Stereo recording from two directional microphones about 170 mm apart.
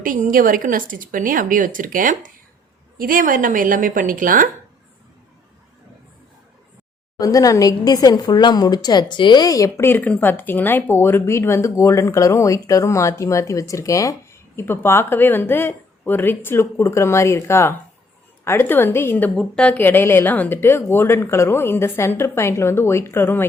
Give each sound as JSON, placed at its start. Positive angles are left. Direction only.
{"t": 0.0, "sound": "a woman's voice", "side_deg": -55}
{"t": 7.2, "sound": "a woman's voice", "side_deg": 20}